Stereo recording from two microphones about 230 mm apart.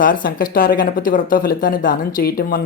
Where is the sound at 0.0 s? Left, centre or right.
Left.